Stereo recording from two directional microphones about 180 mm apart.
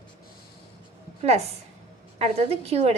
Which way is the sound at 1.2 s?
35° right (ahead or behind).